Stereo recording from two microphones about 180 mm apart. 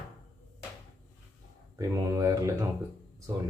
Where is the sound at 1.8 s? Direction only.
15° right (ahead or behind).